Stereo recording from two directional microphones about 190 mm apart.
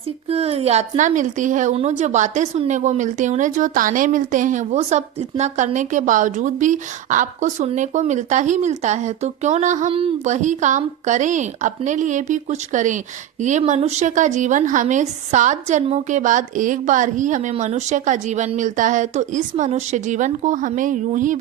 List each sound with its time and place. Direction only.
0.3 s a woman's voice: 30° right (ahead or behind)